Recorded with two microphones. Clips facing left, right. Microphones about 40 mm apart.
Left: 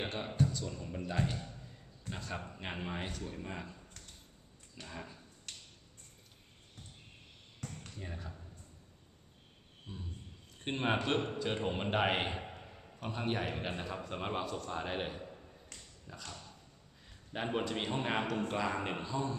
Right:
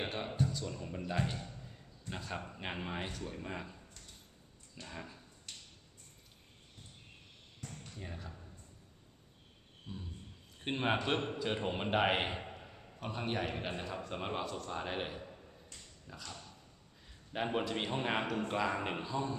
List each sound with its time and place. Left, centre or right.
0.0 s a man's voice: centre
4.9 s a man's voice: centre
5.5 s finger snapping: left
7.9 s speech: centre
9.9 s speech: centre
10.6 s a man's voice: centre
17.3 s a man's voice: centre